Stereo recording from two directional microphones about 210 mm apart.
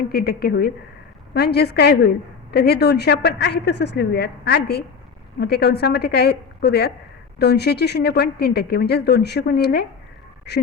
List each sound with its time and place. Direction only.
0.1 s a woman's voice: 45° left (ahead or behind)